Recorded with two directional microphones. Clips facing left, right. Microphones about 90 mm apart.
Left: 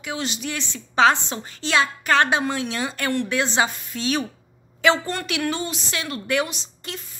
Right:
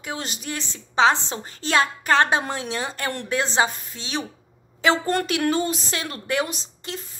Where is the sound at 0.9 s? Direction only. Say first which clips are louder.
Left 1 dB; 25° right (ahead or behind).